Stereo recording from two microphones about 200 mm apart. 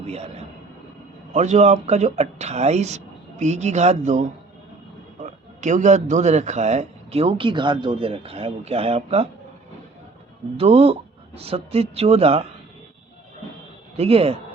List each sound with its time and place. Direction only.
0.0 s a man's voice: 30° right (ahead or behind)
1.3 s a man's voice: 35° right (ahead or behind)
5.2 s a man's voice: 35° right (ahead or behind)
10.6 s a man's voice: 30° right (ahead or behind)
13.9 s a man's voice: 30° right (ahead or behind)